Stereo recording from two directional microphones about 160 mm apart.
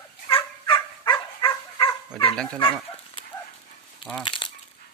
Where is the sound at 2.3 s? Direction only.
5° left (ahead or behind).